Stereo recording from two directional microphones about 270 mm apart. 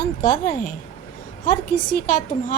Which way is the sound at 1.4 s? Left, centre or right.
Left.